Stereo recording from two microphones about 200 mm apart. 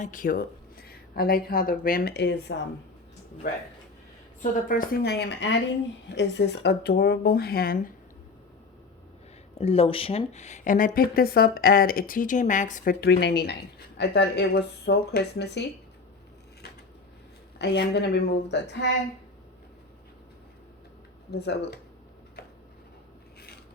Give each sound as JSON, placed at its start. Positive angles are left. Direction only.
{"t": 0.0, "sound": "speech", "side_deg": 40}
{"t": 4.7, "sound": "a woman's voice", "side_deg": 45}
{"t": 9.6, "sound": "speech", "side_deg": 30}
{"t": 17.6, "sound": "a woman's voice", "side_deg": 55}
{"t": 21.2, "sound": "speech", "side_deg": 55}